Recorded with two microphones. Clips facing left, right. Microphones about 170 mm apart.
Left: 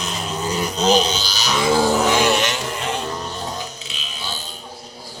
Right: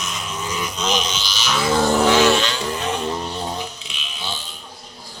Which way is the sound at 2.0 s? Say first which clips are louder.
Right 2 dB; 15° left (ahead or behind).